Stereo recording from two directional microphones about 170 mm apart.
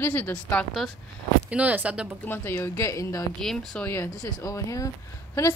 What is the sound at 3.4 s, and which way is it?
A woman's voice, centre (ahead or behind).